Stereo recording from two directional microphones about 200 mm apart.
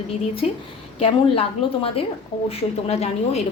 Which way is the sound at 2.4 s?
30° left (ahead or behind).